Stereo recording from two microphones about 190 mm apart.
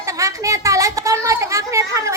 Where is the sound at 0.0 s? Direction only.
15° right (ahead or behind).